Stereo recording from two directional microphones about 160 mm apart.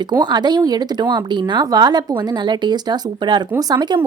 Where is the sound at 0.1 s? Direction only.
25° right (ahead or behind).